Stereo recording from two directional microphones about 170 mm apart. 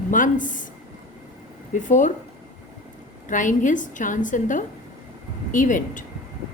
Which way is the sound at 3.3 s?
50° left (ahead or behind).